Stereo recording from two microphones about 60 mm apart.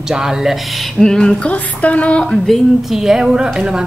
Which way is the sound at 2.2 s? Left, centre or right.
Centre.